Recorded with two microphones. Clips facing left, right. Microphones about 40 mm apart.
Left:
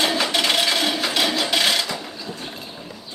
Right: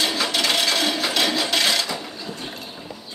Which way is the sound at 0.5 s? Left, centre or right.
Centre.